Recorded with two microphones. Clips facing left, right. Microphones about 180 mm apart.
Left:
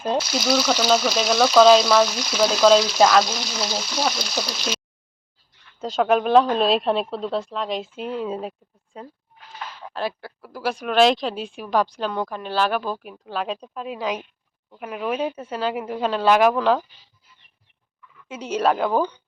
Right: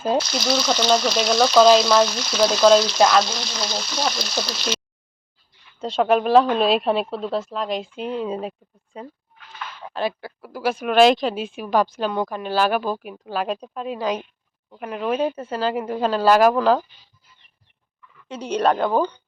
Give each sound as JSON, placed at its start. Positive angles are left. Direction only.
{"t": 0.2, "sound": "frying", "side_deg": 5}
{"t": 5.8, "sound": "frying", "side_deg": 0}
{"t": 9.4, "sound": "a sound", "side_deg": 35}
{"t": 9.8, "sound": "frying", "side_deg": 0}
{"t": 18.3, "sound": "frying", "side_deg": 5}